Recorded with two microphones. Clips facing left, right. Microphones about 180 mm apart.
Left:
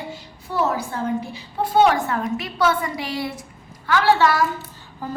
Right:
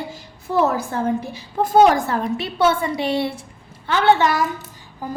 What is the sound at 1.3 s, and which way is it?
A woman's voice, 45° right (ahead or behind).